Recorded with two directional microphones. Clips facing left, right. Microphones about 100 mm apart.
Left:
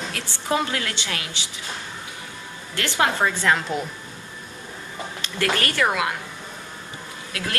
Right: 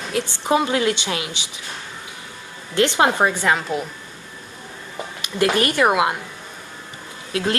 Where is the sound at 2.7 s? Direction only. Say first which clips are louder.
Right 6 dB; 20° right (ahead or behind).